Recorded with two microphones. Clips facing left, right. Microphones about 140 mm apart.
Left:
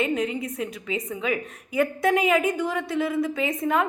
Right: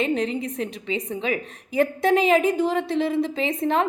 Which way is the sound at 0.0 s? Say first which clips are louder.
Right 1 dB; 30° right (ahead or behind).